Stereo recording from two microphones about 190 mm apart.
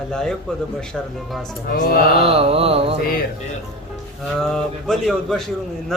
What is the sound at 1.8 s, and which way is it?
Speech, 50° left (ahead or behind).